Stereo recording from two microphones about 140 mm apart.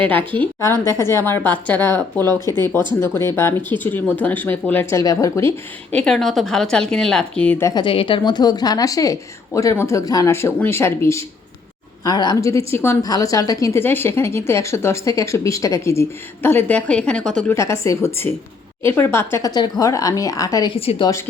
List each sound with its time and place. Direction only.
0.6 s a woman's voice: 20° left (ahead or behind)
6.0 s speech: 5° left (ahead or behind)
7.7 s a woman's voice: 35° left (ahead or behind); by 17.4 s 5° left (ahead or behind)
17.5 s a woman's voice: 20° left (ahead or behind)